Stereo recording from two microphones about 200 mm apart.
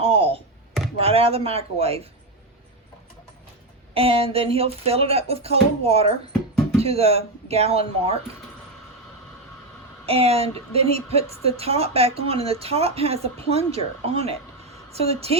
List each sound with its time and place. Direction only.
0.0 s a sound: 30° right (ahead or behind)
0.9 s speech: 30° right (ahead or behind)
3.9 s a woman's voice: 30° right (ahead or behind)
10.1 s a woman's voice: 30° right (ahead or behind)